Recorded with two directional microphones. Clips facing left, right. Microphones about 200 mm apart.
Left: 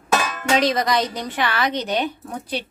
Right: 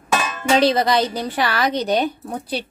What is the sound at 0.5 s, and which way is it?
A woman's voice, 30° right (ahead or behind).